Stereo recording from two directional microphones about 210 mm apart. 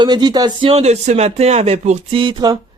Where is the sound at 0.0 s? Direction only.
20° right (ahead or behind).